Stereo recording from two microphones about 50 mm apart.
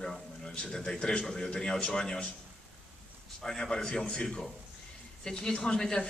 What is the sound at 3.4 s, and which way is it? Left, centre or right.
A man's voice, centre.